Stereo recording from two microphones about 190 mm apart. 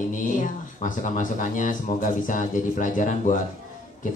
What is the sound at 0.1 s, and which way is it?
Speech, 45° left (ahead or behind).